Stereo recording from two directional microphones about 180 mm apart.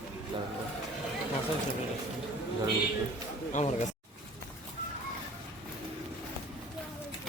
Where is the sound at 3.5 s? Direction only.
40° left (ahead or behind).